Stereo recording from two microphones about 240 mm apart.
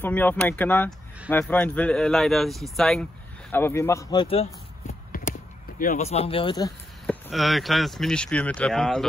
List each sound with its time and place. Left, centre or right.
0.0 s speech: centre
5.8 s speech: left
7.1 s speech: centre